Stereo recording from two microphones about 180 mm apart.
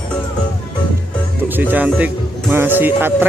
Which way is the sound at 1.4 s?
10° right (ahead or behind).